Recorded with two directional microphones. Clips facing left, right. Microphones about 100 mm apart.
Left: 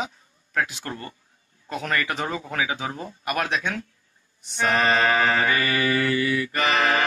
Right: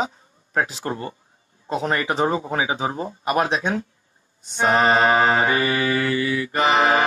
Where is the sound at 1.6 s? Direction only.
25° right (ahead or behind).